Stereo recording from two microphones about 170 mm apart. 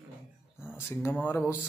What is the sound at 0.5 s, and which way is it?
Speech, 15° left (ahead or behind).